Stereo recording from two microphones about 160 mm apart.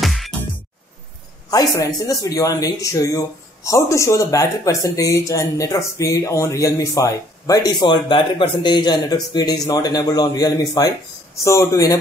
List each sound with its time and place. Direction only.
0.0 s music: centre (ahead or behind)
1.5 s speech: 20° left (ahead or behind)